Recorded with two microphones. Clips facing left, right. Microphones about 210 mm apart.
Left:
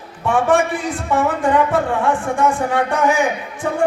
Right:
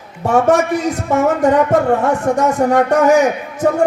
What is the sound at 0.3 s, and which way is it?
A man's voice, 40° right (ahead or behind).